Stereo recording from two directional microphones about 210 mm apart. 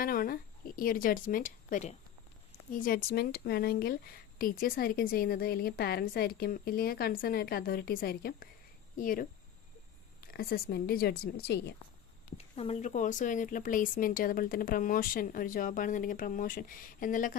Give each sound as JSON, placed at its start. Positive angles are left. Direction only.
{"t": 0.0, "sound": "a woman's voice", "side_deg": 45}
{"t": 10.3, "sound": "speech", "side_deg": 50}
{"t": 12.5, "sound": "a woman's voice", "side_deg": 30}